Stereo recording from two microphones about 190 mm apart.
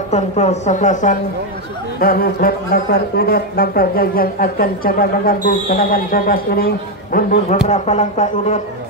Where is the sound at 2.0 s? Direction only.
50° left (ahead or behind).